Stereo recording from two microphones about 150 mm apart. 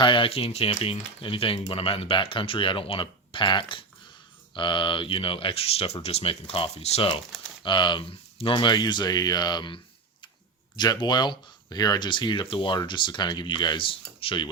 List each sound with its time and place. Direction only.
0.0 s speech: 35° left (ahead or behind)